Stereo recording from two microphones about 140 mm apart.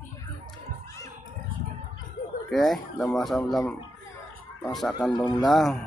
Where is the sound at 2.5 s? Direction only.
Centre (ahead or behind).